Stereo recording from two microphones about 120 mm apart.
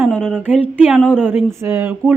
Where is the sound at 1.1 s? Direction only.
10° right (ahead or behind).